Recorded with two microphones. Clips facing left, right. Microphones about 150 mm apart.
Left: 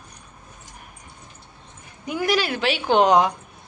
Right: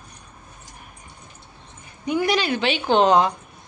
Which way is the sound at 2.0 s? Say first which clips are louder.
Right 1 dB; 5° left (ahead or behind).